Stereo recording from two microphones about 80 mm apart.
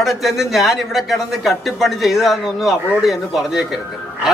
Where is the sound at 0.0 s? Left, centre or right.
Centre.